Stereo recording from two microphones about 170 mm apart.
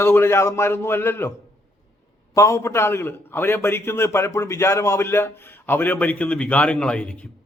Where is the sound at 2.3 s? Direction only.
20° left (ahead or behind).